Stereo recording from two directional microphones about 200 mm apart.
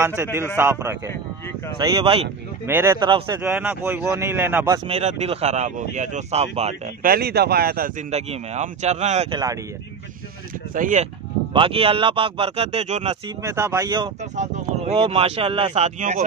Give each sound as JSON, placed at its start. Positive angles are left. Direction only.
{"t": 0.0, "sound": "speech", "side_deg": -15}
{"t": 1.8, "sound": "speech", "side_deg": -25}
{"t": 2.6, "sound": "speech", "side_deg": -10}
{"t": 3.1, "sound": "speech", "side_deg": -25}
{"t": 3.4, "sound": "speech", "side_deg": -10}
{"t": 4.8, "sound": "speech", "side_deg": -30}
{"t": 7.1, "sound": "speech", "side_deg": -50}
{"t": 8.1, "sound": "speech", "side_deg": -35}
{"t": 9.3, "sound": "speech", "side_deg": -20}
{"t": 10.7, "sound": "speech", "side_deg": -40}
{"t": 11.5, "sound": "speech", "side_deg": -25}
{"t": 13.4, "sound": "speech", "side_deg": -15}
{"t": 14.3, "sound": "speech", "side_deg": -35}